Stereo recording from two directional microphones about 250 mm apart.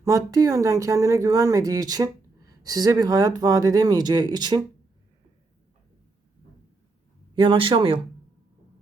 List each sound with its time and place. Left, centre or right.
0.0 s speech: centre
7.3 s speech: right